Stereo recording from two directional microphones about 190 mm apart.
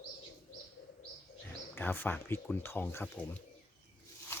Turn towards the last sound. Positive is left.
turn(degrees=10)  # may be behind; listen again after turning